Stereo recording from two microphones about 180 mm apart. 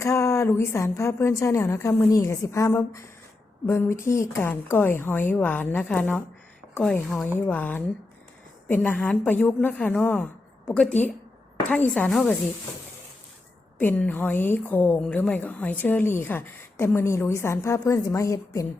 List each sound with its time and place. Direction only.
0.0 s a woman's voice: 15° left (ahead or behind)
13.7 s a woman's voice: 10° left (ahead or behind)